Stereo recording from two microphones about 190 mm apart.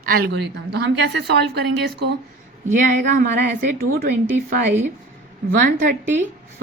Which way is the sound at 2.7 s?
45° right (ahead or behind).